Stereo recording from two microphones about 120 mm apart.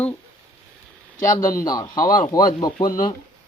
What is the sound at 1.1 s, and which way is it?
Speech, 90° left.